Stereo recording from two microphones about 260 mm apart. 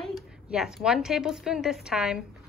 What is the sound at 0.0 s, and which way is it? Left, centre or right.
A woman's voice, centre.